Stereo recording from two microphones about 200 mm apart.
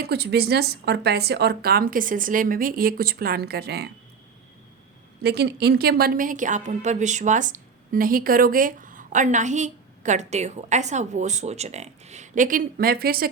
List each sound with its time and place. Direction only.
0.0 s a woman's voice: 55° right (ahead or behind)
5.2 s a woman's voice: 55° right (ahead or behind)